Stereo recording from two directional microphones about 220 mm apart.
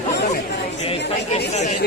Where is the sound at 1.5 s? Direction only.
30° left (ahead or behind).